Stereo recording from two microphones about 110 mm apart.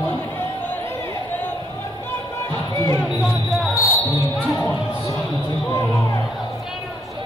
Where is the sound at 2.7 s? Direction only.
30° left (ahead or behind).